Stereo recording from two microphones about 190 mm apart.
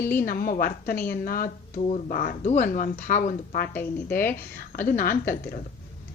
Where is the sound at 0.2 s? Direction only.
50° left (ahead or behind).